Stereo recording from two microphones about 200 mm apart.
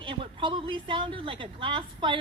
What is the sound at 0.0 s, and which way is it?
A woman's voice, 25° right (ahead or behind).